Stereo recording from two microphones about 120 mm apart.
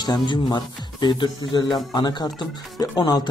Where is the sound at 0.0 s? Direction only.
35° left (ahead or behind).